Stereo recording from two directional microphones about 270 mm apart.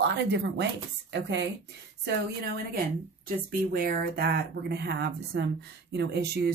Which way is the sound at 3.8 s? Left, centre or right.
Right.